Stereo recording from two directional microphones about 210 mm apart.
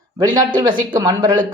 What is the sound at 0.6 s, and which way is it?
Speech, 20° right (ahead or behind).